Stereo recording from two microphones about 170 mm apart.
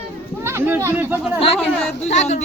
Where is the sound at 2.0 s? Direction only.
40° left (ahead or behind).